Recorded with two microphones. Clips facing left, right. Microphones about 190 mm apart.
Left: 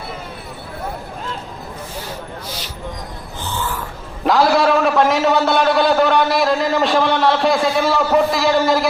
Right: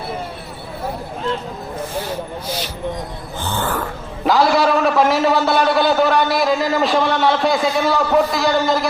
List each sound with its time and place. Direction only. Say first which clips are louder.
3.4 s snoring: right 3 dB; 55° right (ahead or behind)
4.3 s a man's voice: left 1 dB; centre (ahead or behind)